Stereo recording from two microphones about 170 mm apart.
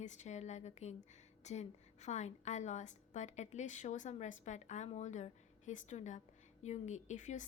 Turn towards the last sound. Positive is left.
turn(degrees=45)  # may be behind; listen again after turning